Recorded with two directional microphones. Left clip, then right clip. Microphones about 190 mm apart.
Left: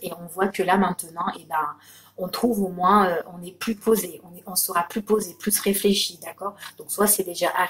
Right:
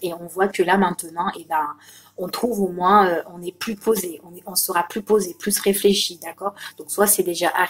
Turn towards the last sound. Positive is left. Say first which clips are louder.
# right 3 dB
turn(degrees=-45)  # may be behind; listen again after turning